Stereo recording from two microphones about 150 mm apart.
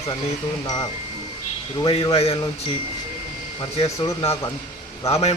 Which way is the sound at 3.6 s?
40° left (ahead or behind).